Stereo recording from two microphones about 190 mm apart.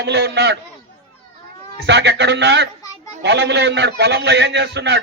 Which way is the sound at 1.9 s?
65° right (ahead or behind).